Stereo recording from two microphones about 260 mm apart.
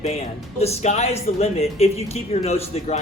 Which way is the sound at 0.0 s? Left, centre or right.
Left.